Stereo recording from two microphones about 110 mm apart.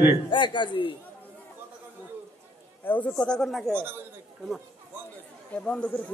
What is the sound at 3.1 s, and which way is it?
Speech, 5° left (ahead or behind).